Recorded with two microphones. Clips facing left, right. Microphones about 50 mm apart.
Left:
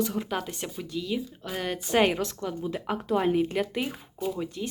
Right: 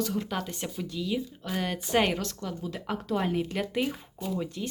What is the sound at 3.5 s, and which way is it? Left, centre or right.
Speech, centre.